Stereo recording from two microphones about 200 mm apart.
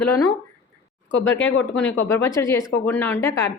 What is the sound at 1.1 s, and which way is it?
Speech, 70° left (ahead or behind).